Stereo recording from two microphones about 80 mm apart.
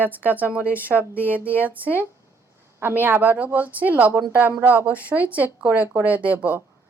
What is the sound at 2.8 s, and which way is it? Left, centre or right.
A woman's voice, right.